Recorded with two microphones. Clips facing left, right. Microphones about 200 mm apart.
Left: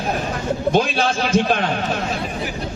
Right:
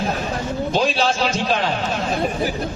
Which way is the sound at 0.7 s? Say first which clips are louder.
Left 2 dB; 55° left (ahead or behind).